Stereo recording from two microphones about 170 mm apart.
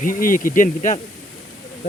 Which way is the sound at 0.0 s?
55° left (ahead or behind).